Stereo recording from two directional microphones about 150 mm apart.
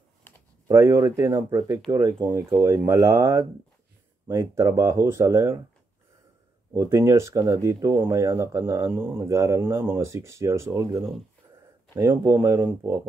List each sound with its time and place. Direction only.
0.7 s speech: 20° right (ahead or behind)
6.7 s speech: 20° right (ahead or behind)